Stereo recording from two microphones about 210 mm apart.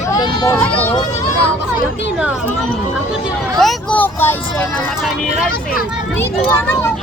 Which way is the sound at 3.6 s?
5° left (ahead or behind).